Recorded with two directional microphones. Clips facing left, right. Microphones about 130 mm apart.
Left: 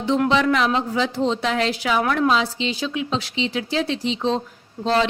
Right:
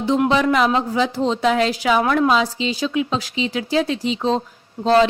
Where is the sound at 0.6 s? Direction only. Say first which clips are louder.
Right 3 dB; 35° right (ahead or behind).